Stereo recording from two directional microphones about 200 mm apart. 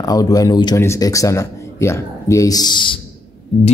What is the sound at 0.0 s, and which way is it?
A man's voice, 20° left (ahead or behind).